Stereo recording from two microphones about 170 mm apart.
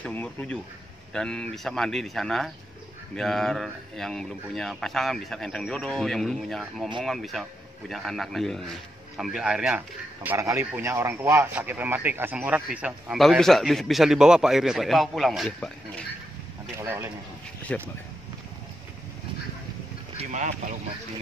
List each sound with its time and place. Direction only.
0.0 s a man's voice: 10° left (ahead or behind)
16.7 s speech: 15° right (ahead or behind)
17.7 s speech: 10° left (ahead or behind)
20.2 s a sound: 45° right (ahead or behind)